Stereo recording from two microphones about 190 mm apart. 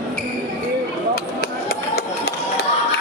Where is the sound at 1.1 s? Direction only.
55° left (ahead or behind).